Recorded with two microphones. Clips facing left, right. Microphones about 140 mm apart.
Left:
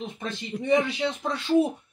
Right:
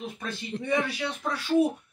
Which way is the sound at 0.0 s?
20° left (ahead or behind).